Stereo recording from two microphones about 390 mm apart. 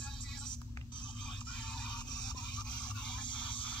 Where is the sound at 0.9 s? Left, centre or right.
Centre.